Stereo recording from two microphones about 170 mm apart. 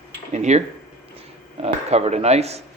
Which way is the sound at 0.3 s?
40° right (ahead or behind).